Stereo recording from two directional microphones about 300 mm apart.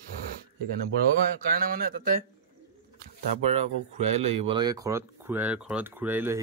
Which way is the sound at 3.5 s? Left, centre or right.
Right.